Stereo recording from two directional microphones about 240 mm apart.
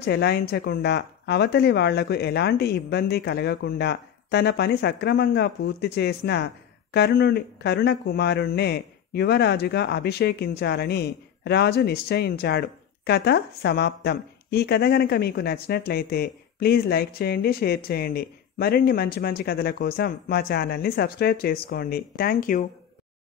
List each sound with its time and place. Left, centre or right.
0.0 s speech: left